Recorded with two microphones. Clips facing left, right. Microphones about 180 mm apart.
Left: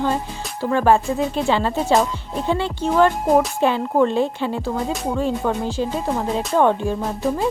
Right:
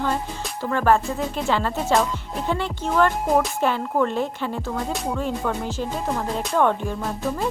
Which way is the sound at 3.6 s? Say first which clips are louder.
Left 4 dB; 20° left (ahead or behind).